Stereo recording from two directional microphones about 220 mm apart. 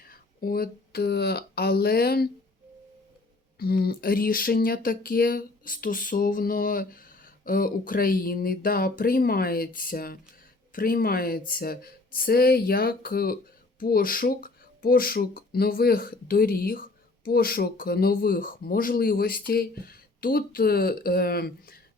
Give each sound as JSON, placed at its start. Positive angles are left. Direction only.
{"t": 0.0, "sound": "speech", "side_deg": 40}
{"t": 3.6, "sound": "a sound", "side_deg": 45}
{"t": 10.7, "sound": "speech", "side_deg": 40}